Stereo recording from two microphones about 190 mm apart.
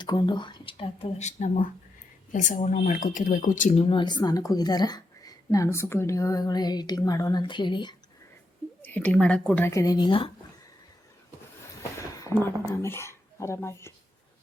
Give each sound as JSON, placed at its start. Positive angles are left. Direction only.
{"t": 0.0, "sound": "speech", "side_deg": 25}
{"t": 8.8, "sound": "a woman's voice", "side_deg": 10}
{"t": 9.6, "sound": "speech", "side_deg": 15}
{"t": 12.7, "sound": "speech", "side_deg": 15}